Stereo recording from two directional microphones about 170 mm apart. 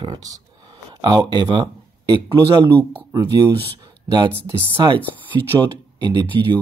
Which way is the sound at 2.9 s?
20° right (ahead or behind).